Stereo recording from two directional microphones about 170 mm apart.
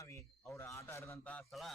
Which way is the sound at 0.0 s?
15° left (ahead or behind).